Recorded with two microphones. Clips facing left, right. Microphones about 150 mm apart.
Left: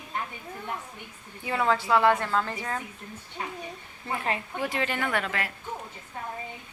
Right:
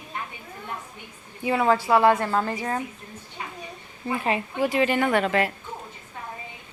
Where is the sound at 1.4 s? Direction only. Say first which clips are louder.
Right 4 dB; 15° right (ahead or behind).